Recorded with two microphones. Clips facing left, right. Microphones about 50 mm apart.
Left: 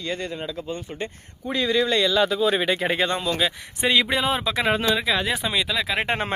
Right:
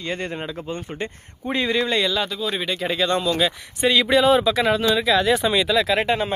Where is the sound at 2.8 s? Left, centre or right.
Left.